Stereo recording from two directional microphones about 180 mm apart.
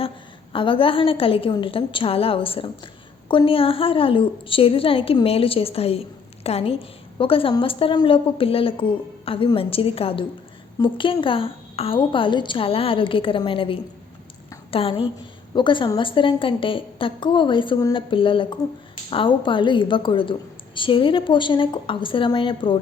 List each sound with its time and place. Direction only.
0.5 s a woman's voice: 30° left (ahead or behind)